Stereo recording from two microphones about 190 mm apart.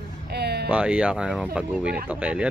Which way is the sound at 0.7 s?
10° right (ahead or behind).